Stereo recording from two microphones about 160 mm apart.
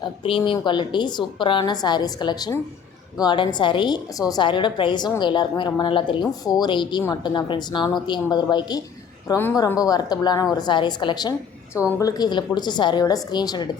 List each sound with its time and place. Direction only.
0.0 s a woman's voice: 35° left (ahead or behind)